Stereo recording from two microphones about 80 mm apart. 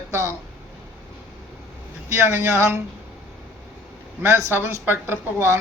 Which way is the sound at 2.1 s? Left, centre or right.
Right.